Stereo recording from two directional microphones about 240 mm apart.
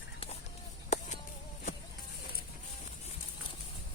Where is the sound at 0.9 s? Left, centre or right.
Left.